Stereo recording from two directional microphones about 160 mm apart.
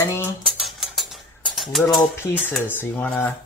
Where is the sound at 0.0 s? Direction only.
15° left (ahead or behind).